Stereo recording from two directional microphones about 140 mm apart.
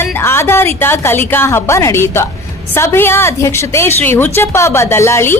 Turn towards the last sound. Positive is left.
turn(degrees=20)  # may be behind; listen again after turning